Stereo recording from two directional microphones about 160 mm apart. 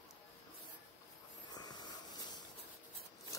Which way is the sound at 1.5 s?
25° left (ahead or behind).